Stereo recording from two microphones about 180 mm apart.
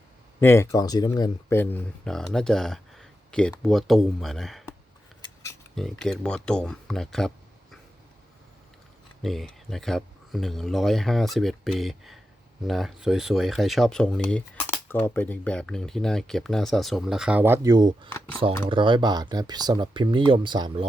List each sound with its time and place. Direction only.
0.3 s speech: 15° left (ahead or behind)
5.7 s speech: 5° left (ahead or behind)
9.2 s speech: centre (ahead or behind); by 20.8 s 25° right (ahead or behind)